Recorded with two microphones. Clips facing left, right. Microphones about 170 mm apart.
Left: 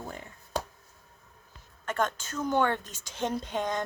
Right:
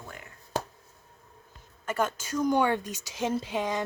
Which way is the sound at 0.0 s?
30° left (ahead or behind).